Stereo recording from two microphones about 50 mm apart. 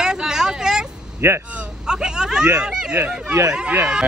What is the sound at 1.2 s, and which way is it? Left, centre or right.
Speech, right.